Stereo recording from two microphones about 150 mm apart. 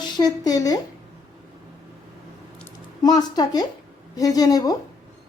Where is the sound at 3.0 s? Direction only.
25° left (ahead or behind).